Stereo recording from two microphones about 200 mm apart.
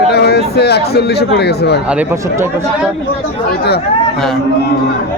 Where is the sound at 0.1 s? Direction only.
55° left (ahead or behind).